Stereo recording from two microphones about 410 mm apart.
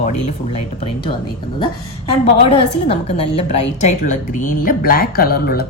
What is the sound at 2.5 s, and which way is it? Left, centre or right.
A woman's voice, centre.